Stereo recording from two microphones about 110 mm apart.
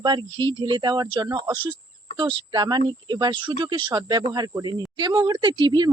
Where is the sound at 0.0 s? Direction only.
45° right (ahead or behind).